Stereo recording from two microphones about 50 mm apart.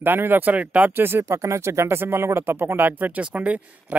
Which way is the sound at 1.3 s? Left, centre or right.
Right.